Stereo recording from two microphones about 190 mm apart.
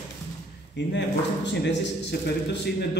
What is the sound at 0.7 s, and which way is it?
A man's voice, 65° left (ahead or behind).